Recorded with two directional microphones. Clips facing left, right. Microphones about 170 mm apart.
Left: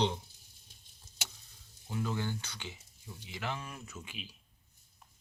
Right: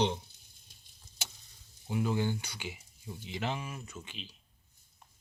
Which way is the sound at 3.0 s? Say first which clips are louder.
Right 4 dB; 20° right (ahead or behind).